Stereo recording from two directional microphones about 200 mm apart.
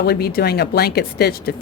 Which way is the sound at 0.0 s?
50° left (ahead or behind).